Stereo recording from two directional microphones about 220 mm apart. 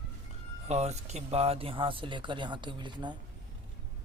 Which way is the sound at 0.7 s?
30° right (ahead or behind).